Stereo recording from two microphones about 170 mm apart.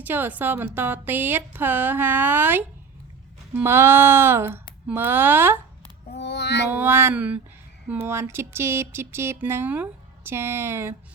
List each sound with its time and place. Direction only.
0.0 s music: 10° right (ahead or behind)
6.1 s child singing: 80° left
6.7 s music: 10° right (ahead or behind)